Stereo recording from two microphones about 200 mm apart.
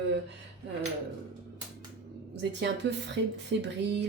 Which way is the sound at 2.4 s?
60° right (ahead or behind).